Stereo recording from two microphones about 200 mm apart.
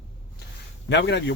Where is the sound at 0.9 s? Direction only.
60° left (ahead or behind).